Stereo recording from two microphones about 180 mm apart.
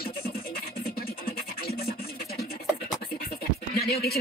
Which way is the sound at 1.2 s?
60° left (ahead or behind).